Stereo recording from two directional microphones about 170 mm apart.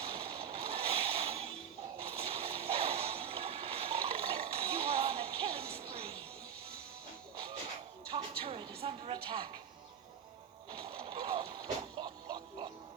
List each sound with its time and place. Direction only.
0.1 s music: 35° right (ahead or behind)
2.0 s water: 35° right (ahead or behind)
5.6 s music: 65° right (ahead or behind)
8.1 s music: 35° right (ahead or behind)
10.7 s a sound: 35° right (ahead or behind)